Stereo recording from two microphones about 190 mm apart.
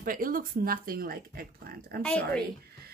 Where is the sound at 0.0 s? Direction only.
50° right (ahead or behind).